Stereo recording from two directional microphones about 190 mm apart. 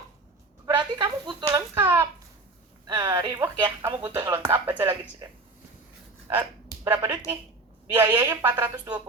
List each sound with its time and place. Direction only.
0.6 s speech: 20° right (ahead or behind)
6.8 s speech: 15° right (ahead or behind)